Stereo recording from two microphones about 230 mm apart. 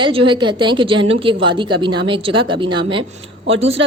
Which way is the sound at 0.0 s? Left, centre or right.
Right.